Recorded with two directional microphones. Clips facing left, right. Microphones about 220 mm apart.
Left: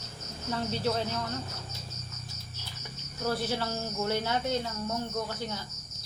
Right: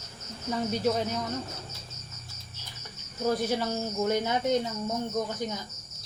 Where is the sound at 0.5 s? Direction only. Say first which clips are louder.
Right 3 dB; 15° right (ahead or behind).